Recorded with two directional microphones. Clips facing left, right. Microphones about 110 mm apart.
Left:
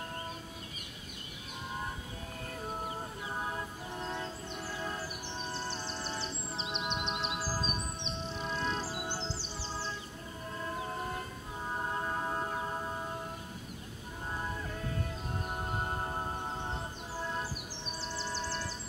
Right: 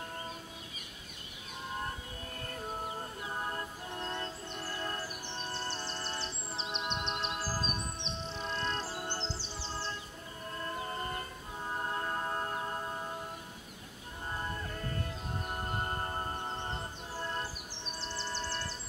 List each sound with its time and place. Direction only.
2.3 s music: centre (ahead or behind)
14.4 s music: centre (ahead or behind)